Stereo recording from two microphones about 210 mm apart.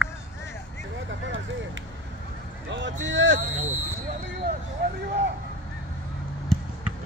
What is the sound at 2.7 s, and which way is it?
Speech, 60° right (ahead or behind).